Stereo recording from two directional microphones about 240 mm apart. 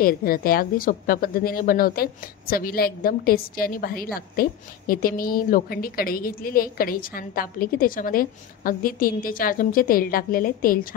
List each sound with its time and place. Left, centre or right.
0.0 s a woman's voice: left